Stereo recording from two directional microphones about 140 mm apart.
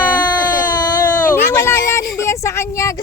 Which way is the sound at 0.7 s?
30° left (ahead or behind).